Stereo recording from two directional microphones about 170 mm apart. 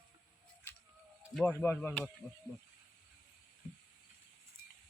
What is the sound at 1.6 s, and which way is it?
Speech, 10° left (ahead or behind).